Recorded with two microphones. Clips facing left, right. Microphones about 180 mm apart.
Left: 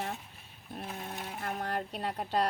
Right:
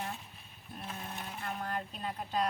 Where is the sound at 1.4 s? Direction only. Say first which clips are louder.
Left 3 dB; 65° left (ahead or behind).